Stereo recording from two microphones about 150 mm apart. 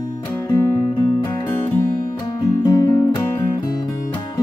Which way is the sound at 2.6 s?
25° left (ahead or behind).